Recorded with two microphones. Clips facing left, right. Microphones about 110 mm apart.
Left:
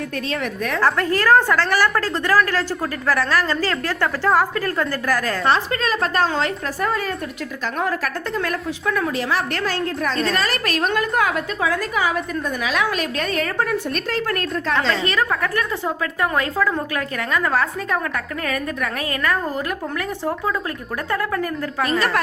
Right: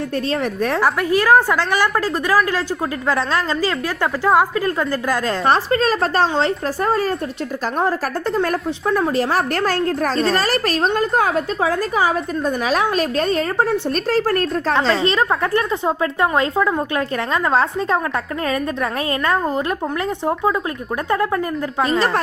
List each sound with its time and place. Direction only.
0.3 s a woman's voice: 35° right (ahead or behind)
0.8 s a woman's voice: 15° right (ahead or behind)
5.5 s a woman's voice: 40° right (ahead or behind)